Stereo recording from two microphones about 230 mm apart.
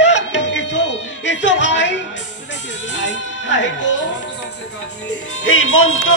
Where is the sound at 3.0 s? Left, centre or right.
Left.